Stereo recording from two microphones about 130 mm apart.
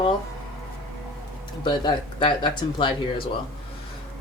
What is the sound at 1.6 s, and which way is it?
Speech, 35° left (ahead or behind).